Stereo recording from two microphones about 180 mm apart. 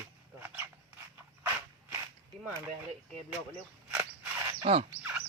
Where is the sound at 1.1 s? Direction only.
15° right (ahead or behind).